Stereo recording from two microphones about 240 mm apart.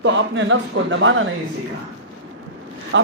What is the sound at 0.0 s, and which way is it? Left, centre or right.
A man's voice, right.